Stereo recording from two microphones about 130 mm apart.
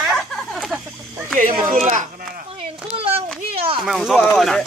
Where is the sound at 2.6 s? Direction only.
50° right (ahead or behind).